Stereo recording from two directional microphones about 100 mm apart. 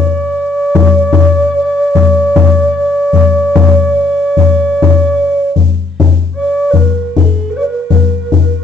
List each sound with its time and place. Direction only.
0.7 s music: centre (ahead or behind)